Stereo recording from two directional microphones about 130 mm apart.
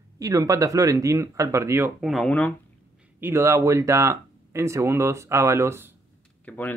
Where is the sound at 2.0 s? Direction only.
Centre (ahead or behind).